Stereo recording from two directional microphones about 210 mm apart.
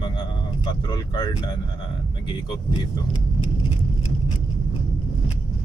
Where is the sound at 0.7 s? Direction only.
20° left (ahead or behind).